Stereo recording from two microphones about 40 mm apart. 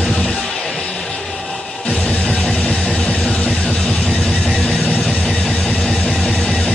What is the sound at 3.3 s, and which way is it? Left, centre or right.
Music, left.